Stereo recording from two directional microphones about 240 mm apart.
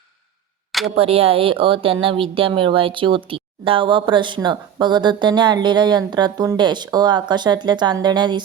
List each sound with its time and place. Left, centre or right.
0.9 s speech: right